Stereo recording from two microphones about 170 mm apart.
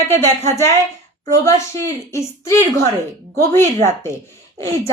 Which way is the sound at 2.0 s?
15° left (ahead or behind).